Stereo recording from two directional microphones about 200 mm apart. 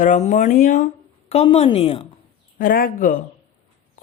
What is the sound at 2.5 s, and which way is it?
Speech, 45° left (ahead or behind).